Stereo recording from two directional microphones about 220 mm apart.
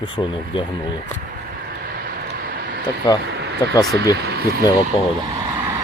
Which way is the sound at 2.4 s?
45° right (ahead or behind).